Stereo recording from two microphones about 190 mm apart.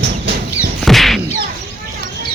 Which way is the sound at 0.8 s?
Centre (ahead or behind).